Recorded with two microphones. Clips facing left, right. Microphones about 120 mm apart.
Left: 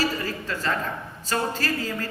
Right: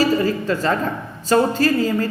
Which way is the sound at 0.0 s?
25° right (ahead or behind).